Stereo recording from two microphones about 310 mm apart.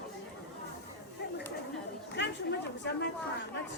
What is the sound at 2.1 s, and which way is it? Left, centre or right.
Speech, left.